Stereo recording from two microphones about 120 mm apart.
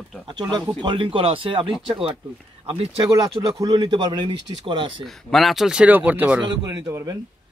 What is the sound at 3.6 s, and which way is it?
Speech, 35° right (ahead or behind).